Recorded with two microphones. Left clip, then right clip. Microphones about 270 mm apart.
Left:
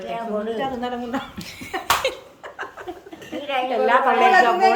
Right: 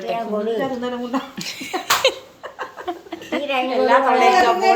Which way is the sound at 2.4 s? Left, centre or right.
Centre.